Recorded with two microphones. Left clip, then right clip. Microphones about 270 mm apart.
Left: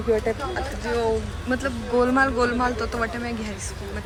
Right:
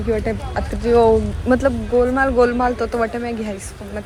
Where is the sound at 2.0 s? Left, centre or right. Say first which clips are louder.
Right 5 dB; centre.